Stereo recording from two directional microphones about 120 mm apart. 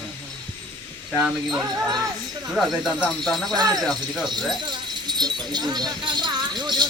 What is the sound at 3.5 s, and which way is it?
Speech, 35° right (ahead or behind).